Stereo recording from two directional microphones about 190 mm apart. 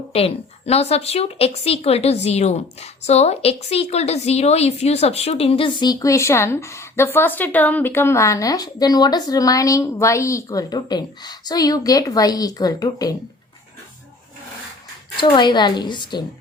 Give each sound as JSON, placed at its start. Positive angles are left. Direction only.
{"t": 0.1, "sound": "a woman's voice", "side_deg": 30}
{"t": 15.1, "sound": "speech", "side_deg": 25}